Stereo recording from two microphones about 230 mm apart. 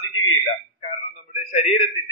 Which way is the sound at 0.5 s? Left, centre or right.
Left.